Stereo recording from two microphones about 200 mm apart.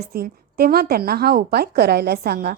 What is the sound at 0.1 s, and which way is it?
A woman's voice, 50° right (ahead or behind).